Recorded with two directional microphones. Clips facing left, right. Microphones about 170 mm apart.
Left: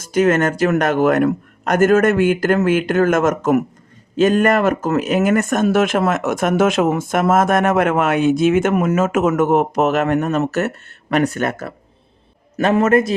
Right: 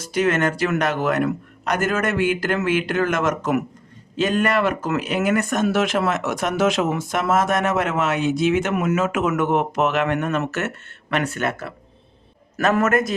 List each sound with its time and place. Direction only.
0.0 s speech: 45° left (ahead or behind)
12.5 s a man's voice: 25° left (ahead or behind)